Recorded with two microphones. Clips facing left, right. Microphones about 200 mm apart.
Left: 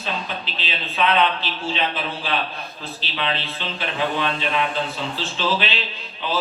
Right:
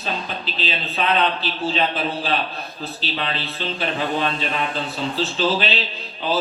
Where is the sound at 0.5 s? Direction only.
40° right (ahead or behind).